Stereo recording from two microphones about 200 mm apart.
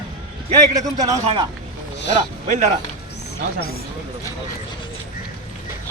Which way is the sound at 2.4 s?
40° right (ahead or behind).